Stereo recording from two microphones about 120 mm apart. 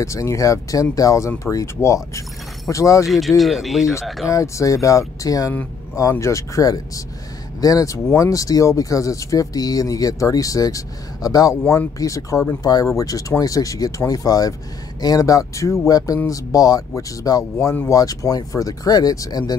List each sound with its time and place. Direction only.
0.0 s speech: 25° left (ahead or behind)
3.1 s speech: centre (ahead or behind)
4.3 s speech: 25° left (ahead or behind)